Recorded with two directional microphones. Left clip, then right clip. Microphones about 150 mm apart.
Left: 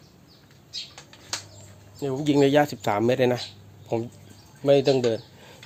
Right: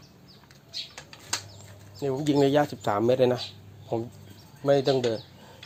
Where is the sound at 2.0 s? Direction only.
45° left (ahead or behind).